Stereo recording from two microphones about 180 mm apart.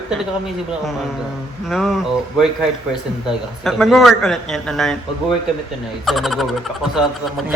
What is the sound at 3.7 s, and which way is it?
Speech, centre (ahead or behind).